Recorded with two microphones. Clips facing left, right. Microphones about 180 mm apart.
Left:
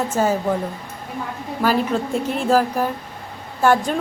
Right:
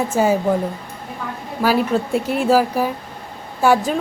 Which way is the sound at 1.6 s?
10° right (ahead or behind).